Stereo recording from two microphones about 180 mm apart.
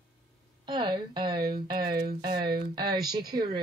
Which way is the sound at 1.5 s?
55° right (ahead or behind).